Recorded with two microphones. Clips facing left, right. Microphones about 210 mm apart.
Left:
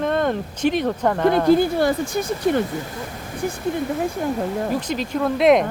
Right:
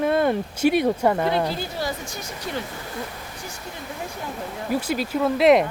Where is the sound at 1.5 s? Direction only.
55° left (ahead or behind).